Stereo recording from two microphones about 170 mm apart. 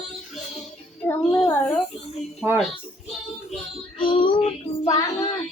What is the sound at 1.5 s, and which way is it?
Speech, 15° left (ahead or behind).